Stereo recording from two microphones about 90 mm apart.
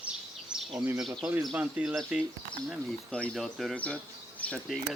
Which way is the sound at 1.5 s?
10° right (ahead or behind).